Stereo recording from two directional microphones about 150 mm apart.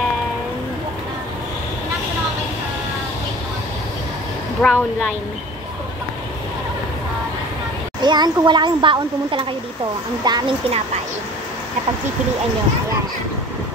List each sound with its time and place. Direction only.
4.6 s speech: 10° left (ahead or behind)
8.0 s speech: 30° right (ahead or behind)